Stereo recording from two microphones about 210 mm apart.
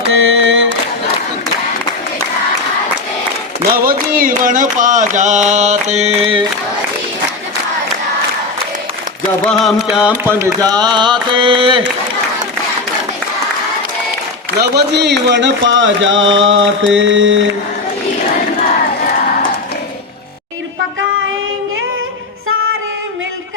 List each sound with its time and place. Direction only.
0.1 s singing: 70° right (ahead or behind)
3.8 s music: 45° right (ahead or behind); by 6.5 s 25° right (ahead or behind)
9.4 s a sound: 5° left (ahead or behind); by 10.8 s 20° right (ahead or behind)
10.9 s music: 20° right (ahead or behind)
14.6 s speech: 55° right (ahead or behind); by 17.4 s 70° right (ahead or behind)